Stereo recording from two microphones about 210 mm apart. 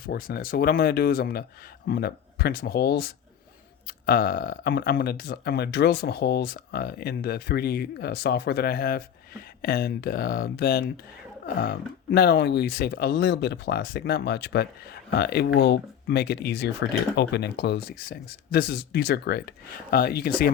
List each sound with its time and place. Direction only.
0.0 s speech: 45° left (ahead or behind)